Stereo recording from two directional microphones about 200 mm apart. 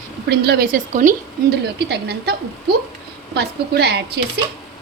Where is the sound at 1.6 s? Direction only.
55° right (ahead or behind).